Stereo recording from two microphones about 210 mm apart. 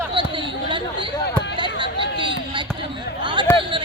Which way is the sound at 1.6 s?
20° right (ahead or behind).